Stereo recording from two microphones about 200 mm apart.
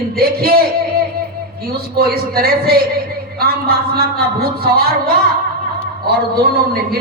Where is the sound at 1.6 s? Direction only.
50° right (ahead or behind).